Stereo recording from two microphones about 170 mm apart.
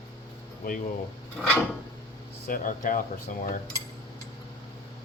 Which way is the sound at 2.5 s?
50° left (ahead or behind).